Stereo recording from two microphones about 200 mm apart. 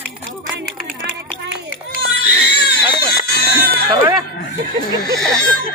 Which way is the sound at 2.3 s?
55° left (ahead or behind).